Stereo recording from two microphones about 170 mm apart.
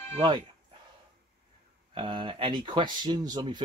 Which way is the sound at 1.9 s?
30° right (ahead or behind).